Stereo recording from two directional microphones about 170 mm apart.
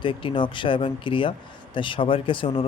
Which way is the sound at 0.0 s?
30° left (ahead or behind).